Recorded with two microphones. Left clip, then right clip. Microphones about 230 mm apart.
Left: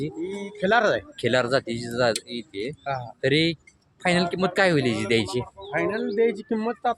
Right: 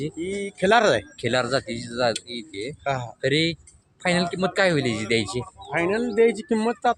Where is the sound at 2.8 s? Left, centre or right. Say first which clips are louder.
Right 5 dB; right.